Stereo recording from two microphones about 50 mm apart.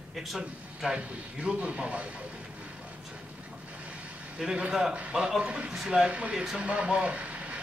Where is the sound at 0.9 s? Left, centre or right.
Right.